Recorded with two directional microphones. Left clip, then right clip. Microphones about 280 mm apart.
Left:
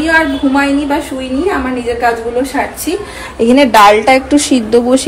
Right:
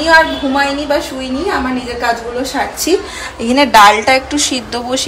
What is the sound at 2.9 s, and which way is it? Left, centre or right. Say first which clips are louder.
Speech: right 4 dB; right.